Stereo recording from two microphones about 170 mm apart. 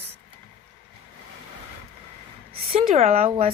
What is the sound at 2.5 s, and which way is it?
Speech, 60° right (ahead or behind).